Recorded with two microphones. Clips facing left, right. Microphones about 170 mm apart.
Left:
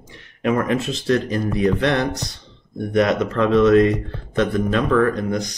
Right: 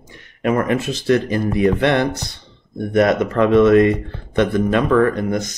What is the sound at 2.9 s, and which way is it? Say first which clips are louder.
Speech: right 3 dB; 50° right (ahead or behind).